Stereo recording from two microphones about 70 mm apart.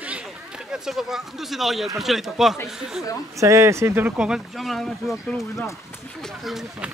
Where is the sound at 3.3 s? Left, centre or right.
Right.